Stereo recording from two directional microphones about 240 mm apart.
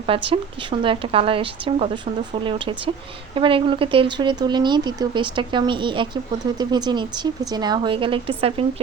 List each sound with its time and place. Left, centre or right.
0.0 s speech: right